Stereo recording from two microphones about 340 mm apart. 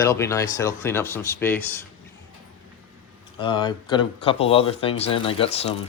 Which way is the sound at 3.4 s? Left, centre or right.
Centre.